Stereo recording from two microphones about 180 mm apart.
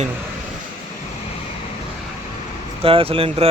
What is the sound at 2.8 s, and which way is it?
Speech, 30° right (ahead or behind).